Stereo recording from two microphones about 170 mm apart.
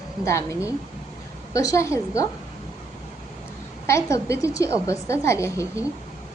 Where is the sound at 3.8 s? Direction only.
15° left (ahead or behind).